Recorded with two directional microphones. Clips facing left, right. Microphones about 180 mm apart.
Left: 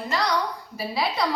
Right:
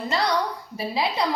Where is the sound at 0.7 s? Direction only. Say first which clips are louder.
Right 1 dB; 20° right (ahead or behind).